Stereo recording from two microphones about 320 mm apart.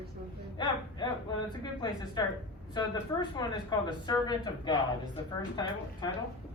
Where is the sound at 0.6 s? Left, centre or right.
Centre.